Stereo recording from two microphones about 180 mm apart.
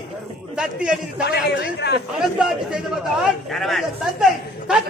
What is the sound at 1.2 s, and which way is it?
Speech, 65° left (ahead or behind).